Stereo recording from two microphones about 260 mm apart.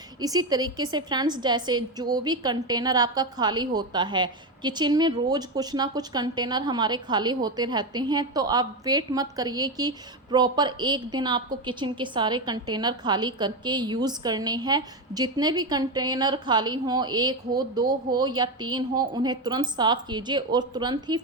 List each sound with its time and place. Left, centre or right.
0.2 s a woman's voice: centre